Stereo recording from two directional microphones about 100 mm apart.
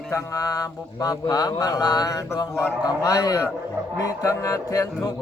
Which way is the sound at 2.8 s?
35° left (ahead or behind).